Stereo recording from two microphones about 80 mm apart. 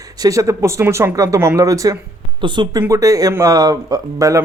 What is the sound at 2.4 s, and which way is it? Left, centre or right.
Speech, right.